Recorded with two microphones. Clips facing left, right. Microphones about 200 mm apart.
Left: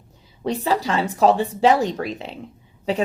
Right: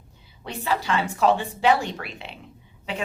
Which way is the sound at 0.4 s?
35° left (ahead or behind).